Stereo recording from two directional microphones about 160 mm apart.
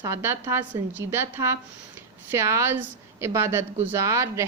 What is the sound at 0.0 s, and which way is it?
A woman's voice, 15° right (ahead or behind).